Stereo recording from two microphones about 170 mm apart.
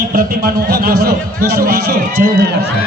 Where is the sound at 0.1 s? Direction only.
55° right (ahead or behind).